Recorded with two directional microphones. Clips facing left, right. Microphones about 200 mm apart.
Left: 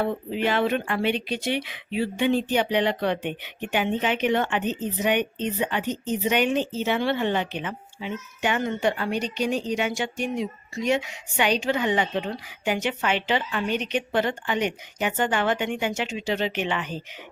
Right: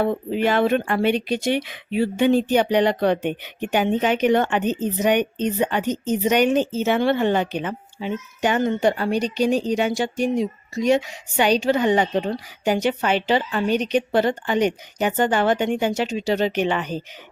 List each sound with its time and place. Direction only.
0.0 s speech: 45° right (ahead or behind)